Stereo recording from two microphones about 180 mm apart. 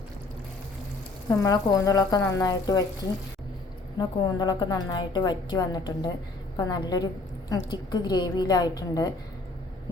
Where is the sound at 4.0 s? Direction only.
25° left (ahead or behind).